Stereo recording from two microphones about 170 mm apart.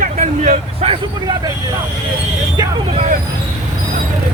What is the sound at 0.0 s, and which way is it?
Vehicle, 50° right (ahead or behind).